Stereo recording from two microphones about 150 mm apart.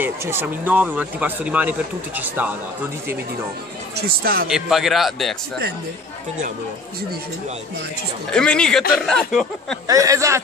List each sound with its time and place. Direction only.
0.0 s speech: 15° right (ahead or behind)
3.9 s speech: 80° right
4.5 s speech: 5° right (ahead or behind)
8.3 s speech: 5° left (ahead or behind)
9.8 s speech: 20° right (ahead or behind)